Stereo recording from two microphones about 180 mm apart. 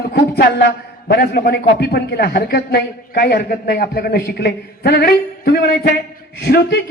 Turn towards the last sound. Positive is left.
turn(degrees=65)  # may be behind; listen again after turning